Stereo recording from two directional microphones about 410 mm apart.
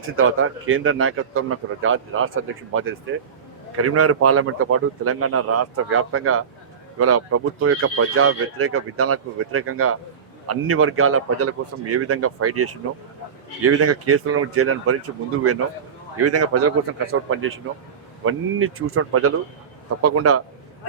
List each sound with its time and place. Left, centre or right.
0.2 s a man's voice: right
16.2 s speech: right